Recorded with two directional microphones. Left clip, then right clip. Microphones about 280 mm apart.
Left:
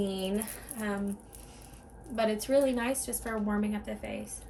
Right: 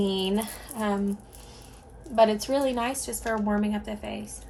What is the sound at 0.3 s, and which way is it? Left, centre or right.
Speech, centre.